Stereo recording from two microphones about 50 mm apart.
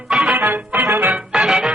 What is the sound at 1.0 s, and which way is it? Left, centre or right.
Music, centre.